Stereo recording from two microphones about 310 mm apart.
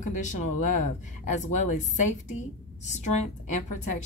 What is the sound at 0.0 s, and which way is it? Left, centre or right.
A woman's voice, left.